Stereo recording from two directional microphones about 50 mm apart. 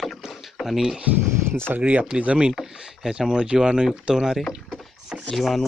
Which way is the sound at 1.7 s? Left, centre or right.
Right.